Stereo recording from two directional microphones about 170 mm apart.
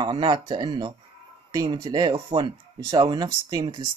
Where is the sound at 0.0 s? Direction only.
30° right (ahead or behind).